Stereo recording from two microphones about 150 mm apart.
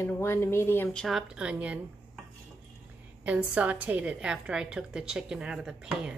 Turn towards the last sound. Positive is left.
turn(degrees=-5)  # may be behind; listen again after turning